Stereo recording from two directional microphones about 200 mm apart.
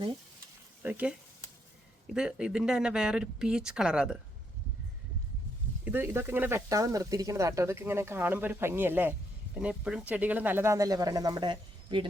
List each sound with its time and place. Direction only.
0.8 s speech: 10° right (ahead or behind)
2.1 s speech: 5° right (ahead or behind)
5.8 s speech: 10° right (ahead or behind)